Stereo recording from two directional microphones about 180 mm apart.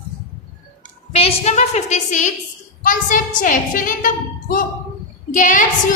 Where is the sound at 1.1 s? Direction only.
35° left (ahead or behind).